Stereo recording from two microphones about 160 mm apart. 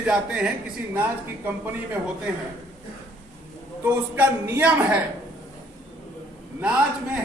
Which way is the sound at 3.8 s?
15° right (ahead or behind).